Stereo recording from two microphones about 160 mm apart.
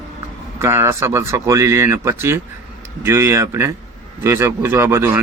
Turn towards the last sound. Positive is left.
turn(degrees=-15)  # may be behind; listen again after turning